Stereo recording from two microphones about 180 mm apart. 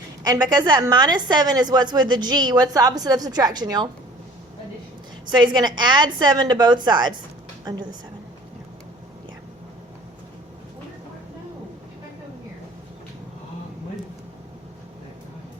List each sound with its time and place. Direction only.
0.3 s a woman's voice: 20° right (ahead or behind)
5.3 s a woman's voice: 25° right (ahead or behind)